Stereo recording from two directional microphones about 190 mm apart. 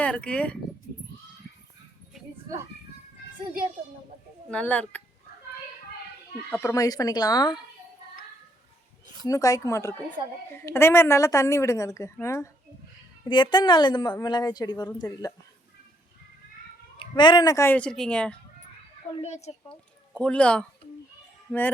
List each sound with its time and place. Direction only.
0.0 s a woman's voice: 5° left (ahead or behind)
4.5 s a woman's voice: 5° left (ahead or behind)
6.5 s a woman's voice: 10° left (ahead or behind)
9.2 s a woman's voice: 20° left (ahead or behind)
17.0 s a woman's voice: 25° left (ahead or behind); by 18.3 s 5° left (ahead or behind)
19.1 s speech: 35° left (ahead or behind)
20.1 s speech: 5° left (ahead or behind)